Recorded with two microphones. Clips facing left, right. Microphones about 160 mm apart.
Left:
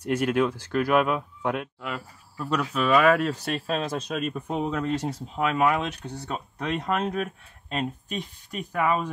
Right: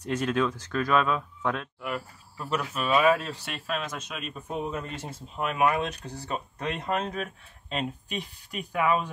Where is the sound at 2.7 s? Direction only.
65° left (ahead or behind).